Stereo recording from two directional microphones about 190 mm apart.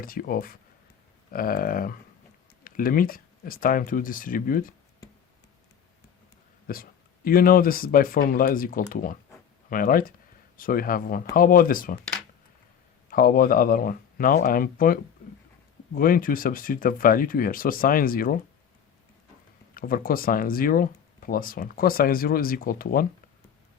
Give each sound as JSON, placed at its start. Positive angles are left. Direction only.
{"t": 0.0, "sound": "speech", "side_deg": 50}
{"t": 6.7, "sound": "speech", "side_deg": 50}
{"t": 13.1, "sound": "speech", "side_deg": 50}
{"t": 16.0, "sound": "speech", "side_deg": 50}
{"t": 19.7, "sound": "speech", "side_deg": 50}